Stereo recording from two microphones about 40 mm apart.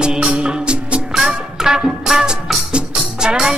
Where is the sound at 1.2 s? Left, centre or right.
Centre.